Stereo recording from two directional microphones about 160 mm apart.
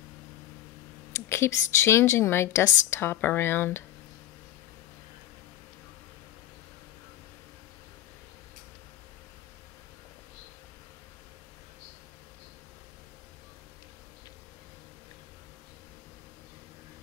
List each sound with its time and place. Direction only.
1.1 s a woman's voice: 15° left (ahead or behind)